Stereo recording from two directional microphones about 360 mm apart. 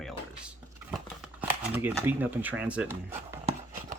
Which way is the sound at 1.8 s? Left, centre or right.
Centre.